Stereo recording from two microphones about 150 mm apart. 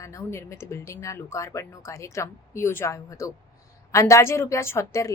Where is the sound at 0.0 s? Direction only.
20° left (ahead or behind).